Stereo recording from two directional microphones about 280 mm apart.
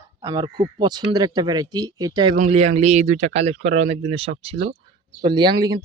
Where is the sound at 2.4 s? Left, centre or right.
Right.